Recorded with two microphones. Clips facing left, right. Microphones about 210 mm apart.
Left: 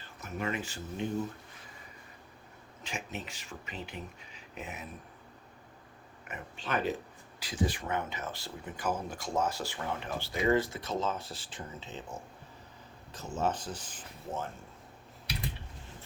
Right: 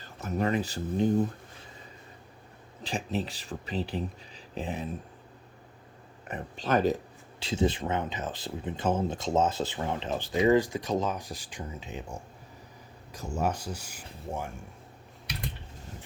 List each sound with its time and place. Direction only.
0.0 s speech: 40° right (ahead or behind)
2.8 s speech: 35° right (ahead or behind)
6.2 s speech: 35° right (ahead or behind)
7.3 s speech: 25° right (ahead or behind)
13.4 s speech: 10° right (ahead or behind)